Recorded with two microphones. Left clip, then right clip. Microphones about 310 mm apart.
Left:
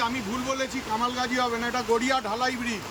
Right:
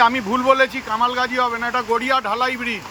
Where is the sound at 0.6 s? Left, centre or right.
Centre.